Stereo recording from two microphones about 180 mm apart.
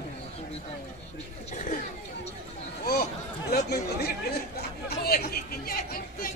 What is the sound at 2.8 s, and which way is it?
Chatter, 60° left (ahead or behind).